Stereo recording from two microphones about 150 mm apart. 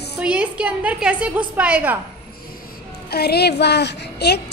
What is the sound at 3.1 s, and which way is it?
A woman's voice, 90° left.